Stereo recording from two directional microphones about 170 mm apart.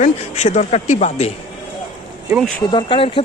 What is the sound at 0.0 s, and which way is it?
Speech, 45° left (ahead or behind).